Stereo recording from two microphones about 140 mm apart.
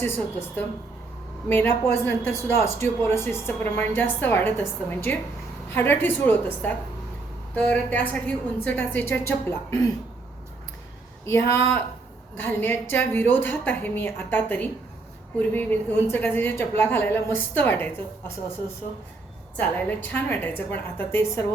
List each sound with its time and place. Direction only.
0.0 s a woman's voice: 15° left (ahead or behind)
11.3 s a woman's voice: 20° left (ahead or behind)
19.5 s a woman's voice: 10° left (ahead or behind)